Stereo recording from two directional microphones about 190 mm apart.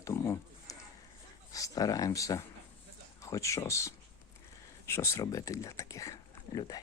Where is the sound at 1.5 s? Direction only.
20° left (ahead or behind).